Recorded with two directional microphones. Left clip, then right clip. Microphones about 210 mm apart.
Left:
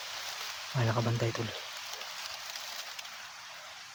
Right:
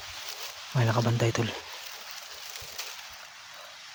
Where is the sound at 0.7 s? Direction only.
20° right (ahead or behind).